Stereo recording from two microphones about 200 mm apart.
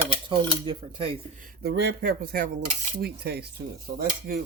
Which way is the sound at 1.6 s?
55° right (ahead or behind).